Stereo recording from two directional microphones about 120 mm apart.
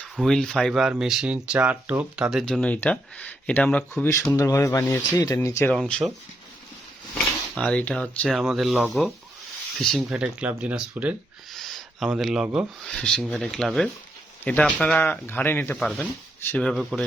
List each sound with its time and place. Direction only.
0.2 s speech: 5° left (ahead or behind)
2.4 s speech: 10° left (ahead or behind)
4.4 s speech: 25° left (ahead or behind)
5.7 s speech: 5° left (ahead or behind)
7.5 s speech: 10° left (ahead or behind); by 11.1 s 10° right (ahead or behind)
11.5 s a sound: centre (ahead or behind)
12.9 s speech: 5° left (ahead or behind)
15.8 s speech: 5° left (ahead or behind)
16.4 s speech: 20° left (ahead or behind)
16.6 s speech: 5° left (ahead or behind)